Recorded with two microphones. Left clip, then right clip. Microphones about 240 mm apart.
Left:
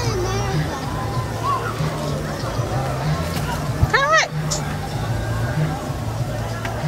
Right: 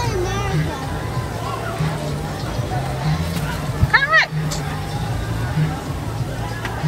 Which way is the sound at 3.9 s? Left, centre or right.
Left.